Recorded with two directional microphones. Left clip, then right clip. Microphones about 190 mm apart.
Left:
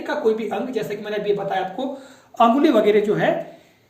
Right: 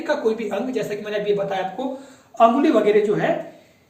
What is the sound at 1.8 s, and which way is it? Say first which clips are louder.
Speech: even; 45° left (ahead or behind).